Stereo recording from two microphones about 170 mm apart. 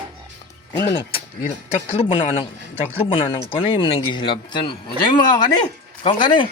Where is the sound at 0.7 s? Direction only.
20° left (ahead or behind).